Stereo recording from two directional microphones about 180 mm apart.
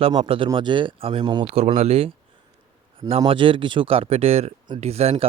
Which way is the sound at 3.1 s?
30° right (ahead or behind).